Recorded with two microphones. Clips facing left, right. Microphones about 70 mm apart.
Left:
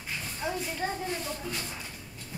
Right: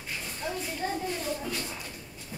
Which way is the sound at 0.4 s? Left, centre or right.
Centre.